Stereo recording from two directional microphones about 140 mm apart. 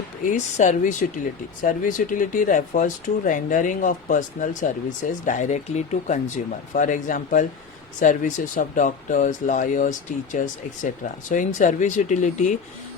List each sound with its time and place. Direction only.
0.3 s speech: 60° left (ahead or behind)